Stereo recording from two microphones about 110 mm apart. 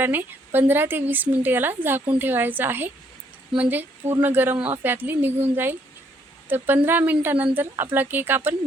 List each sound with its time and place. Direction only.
0.0 s a woman's voice: 20° right (ahead or behind)
6.8 s a woman's voice: 15° right (ahead or behind)